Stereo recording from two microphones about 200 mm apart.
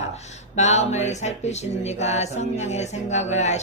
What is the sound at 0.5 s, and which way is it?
Speech, 35° left (ahead or behind).